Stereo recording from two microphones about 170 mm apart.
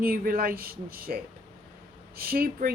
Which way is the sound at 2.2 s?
60° right (ahead or behind).